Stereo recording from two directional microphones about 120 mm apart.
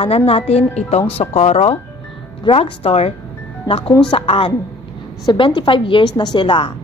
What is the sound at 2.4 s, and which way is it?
A woman's voice, 50° left (ahead or behind).